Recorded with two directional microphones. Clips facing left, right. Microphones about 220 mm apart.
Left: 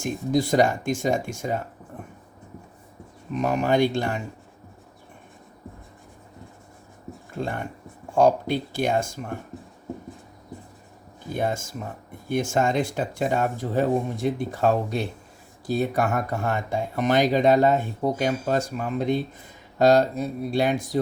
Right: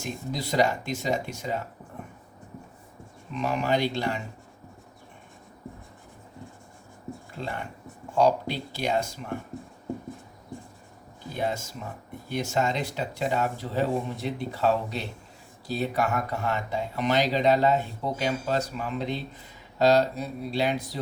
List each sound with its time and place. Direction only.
0.0 s speech: 50° left (ahead or behind)
3.3 s speech: 45° left (ahead or behind)
7.3 s speech: 50° left (ahead or behind)
11.3 s speech: 50° left (ahead or behind)